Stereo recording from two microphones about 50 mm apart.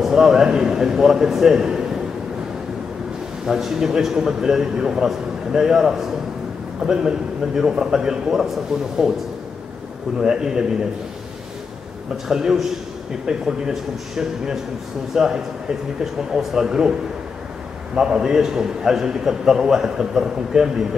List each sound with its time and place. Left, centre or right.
0.0 s a man's voice: centre
3.4 s a man's voice: centre
10.1 s a man's voice: centre
12.3 s a man's voice: centre
17.9 s a man's voice: centre